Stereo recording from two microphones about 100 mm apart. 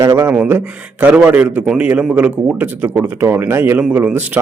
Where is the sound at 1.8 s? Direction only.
10° right (ahead or behind).